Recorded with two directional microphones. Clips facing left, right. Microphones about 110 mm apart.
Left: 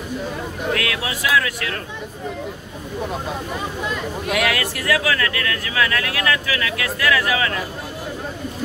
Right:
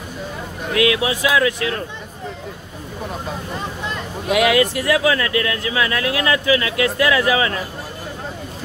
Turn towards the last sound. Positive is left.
turn(degrees=-25)  # may be behind; listen again after turning